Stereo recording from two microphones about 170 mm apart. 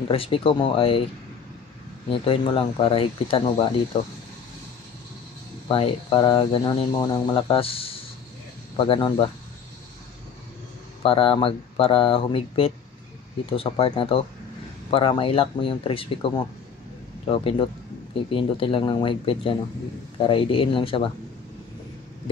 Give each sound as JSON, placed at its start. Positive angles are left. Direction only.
{"t": 0.1, "sound": "speech", "side_deg": 35}
{"t": 2.0, "sound": "speech", "side_deg": 30}
{"t": 5.7, "sound": "speech", "side_deg": 30}
{"t": 11.0, "sound": "speech", "side_deg": 35}